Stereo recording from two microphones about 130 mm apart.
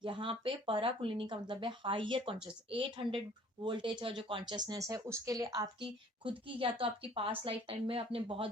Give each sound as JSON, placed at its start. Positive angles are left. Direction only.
{"t": 0.0, "sound": "speech", "side_deg": -40}
{"t": 5.8, "sound": "a woman's voice", "side_deg": -45}